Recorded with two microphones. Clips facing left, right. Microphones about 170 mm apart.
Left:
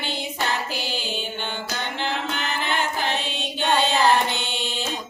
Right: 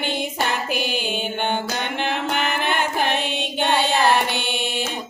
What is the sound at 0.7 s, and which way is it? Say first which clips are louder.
Music: right 5 dB; 55° right (ahead or behind).